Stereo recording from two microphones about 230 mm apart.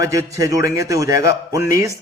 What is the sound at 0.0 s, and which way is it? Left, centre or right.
A man's voice, centre.